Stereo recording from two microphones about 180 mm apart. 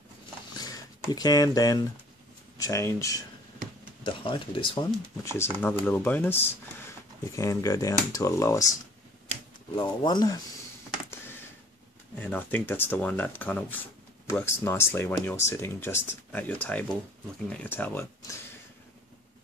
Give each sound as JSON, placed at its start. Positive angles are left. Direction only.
{"t": 0.6, "sound": "a sound", "side_deg": 20}
{"t": 2.5, "sound": "speech", "side_deg": 20}
{"t": 4.0, "sound": "speech", "side_deg": 30}
{"t": 5.2, "sound": "speech", "side_deg": 15}
{"t": 9.8, "sound": "speech", "side_deg": 25}
{"t": 11.1, "sound": "computer keyboard", "side_deg": 15}
{"t": 12.2, "sound": "speech", "side_deg": 10}